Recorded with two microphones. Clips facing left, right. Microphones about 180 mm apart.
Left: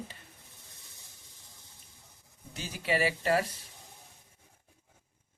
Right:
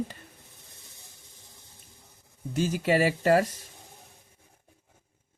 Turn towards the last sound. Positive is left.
turn(degrees=-45)  # may be behind; listen again after turning